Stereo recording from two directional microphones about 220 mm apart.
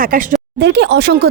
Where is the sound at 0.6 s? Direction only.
50° right (ahead or behind).